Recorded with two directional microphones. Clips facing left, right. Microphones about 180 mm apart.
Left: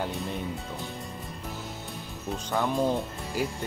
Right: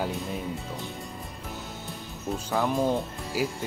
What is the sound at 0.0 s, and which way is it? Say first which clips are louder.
Speech: right 1 dB; centre (ahead or behind).